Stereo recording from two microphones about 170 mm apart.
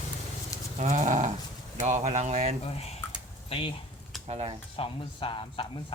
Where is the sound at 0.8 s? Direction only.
45° right (ahead or behind).